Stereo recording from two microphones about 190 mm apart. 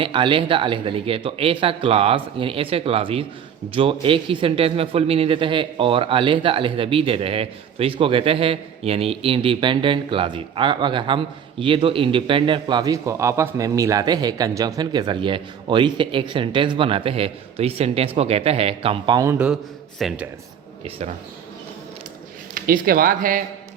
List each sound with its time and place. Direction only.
0.0 s speech: 25° right (ahead or behind)
20.0 s speech: centre (ahead or behind)
22.5 s speech: 50° right (ahead or behind)